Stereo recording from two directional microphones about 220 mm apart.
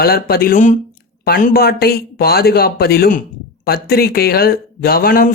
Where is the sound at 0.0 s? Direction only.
45° left (ahead or behind).